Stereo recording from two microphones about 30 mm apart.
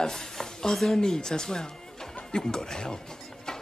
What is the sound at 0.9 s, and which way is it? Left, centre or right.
A woman's voice, centre.